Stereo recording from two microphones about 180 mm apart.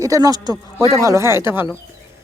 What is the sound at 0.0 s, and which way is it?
Speech, 20° right (ahead or behind).